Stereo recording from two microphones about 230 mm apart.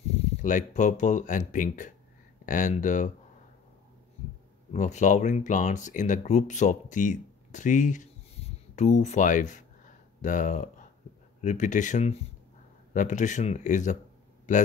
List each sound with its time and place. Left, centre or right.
0.1 s speech: left
4.7 s speech: left